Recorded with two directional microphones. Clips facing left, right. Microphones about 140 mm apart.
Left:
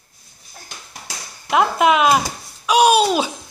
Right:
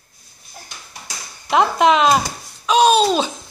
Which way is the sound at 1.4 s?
5° left (ahead or behind).